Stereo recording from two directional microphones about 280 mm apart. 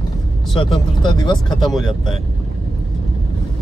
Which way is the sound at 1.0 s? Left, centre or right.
Centre.